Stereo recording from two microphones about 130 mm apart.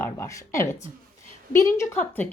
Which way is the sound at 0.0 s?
20° left (ahead or behind).